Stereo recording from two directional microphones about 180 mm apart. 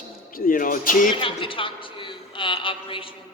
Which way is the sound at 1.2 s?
30° left (ahead or behind).